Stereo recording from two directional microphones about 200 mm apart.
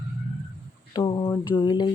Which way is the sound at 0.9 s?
20° left (ahead or behind).